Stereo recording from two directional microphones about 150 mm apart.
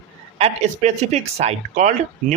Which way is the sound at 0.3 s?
45° right (ahead or behind).